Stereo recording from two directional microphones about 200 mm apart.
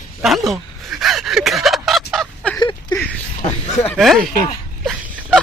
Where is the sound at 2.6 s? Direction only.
20° left (ahead or behind).